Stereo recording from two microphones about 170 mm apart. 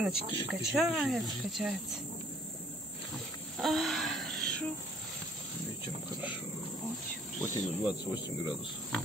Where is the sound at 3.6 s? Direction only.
Centre (ahead or behind).